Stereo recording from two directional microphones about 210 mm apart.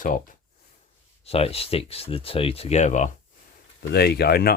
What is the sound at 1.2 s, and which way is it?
Speech, 30° left (ahead or behind).